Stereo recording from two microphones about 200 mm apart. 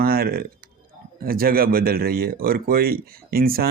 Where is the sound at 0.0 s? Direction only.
50° right (ahead or behind).